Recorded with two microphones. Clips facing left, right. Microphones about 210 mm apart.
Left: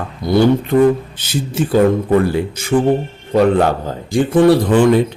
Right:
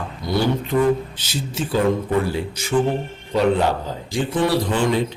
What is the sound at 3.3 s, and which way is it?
A man's voice, 55° left (ahead or behind).